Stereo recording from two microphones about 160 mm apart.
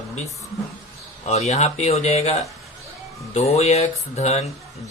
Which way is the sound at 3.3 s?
40° left (ahead or behind).